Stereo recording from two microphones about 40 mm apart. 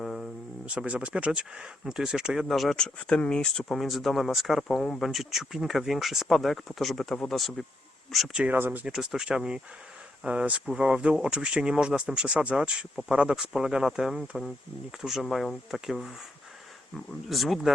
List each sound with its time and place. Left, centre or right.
0.0 s a sound: centre
0.6 s speech: right
1.8 s speech: centre
2.5 s speech: centre
2.7 s speech: left
3.5 s speech: centre
3.8 s speech: centre
8.5 s speech: right
8.9 s speech: centre
10.2 s speech: right; by 16.1 s centre
17.2 s speech: centre